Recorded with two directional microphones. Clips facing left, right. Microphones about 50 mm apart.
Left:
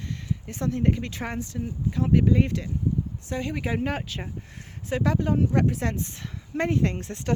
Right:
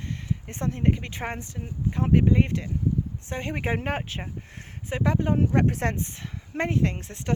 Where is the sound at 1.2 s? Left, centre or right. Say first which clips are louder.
Left 2 dB; right.